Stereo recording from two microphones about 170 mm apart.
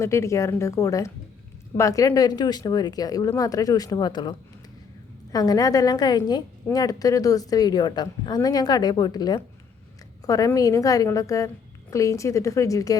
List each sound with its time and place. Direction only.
0.0 s a woman's voice: 15° left (ahead or behind)